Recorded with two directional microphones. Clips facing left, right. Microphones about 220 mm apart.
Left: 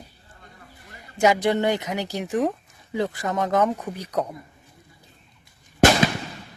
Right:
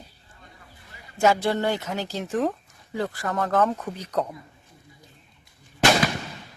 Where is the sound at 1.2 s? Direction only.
15° left (ahead or behind).